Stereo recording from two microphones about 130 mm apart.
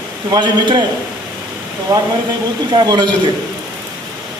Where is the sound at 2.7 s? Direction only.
35° right (ahead or behind).